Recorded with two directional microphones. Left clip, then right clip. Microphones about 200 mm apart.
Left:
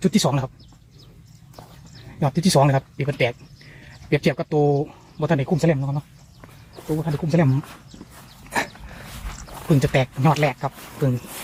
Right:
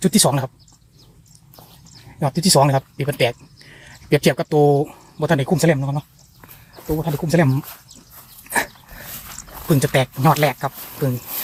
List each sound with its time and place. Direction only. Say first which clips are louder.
0.0 s speech: right 4 dB; 30° right (ahead or behind)
2.0 s speech: right 3 dB; 10° right (ahead or behind)
8.4 s dog: right 3 dB; 15° right (ahead or behind)
9.0 s dog: right 3 dB; 30° right (ahead or behind)
9.5 s speech: right 2 dB; 20° right (ahead or behind)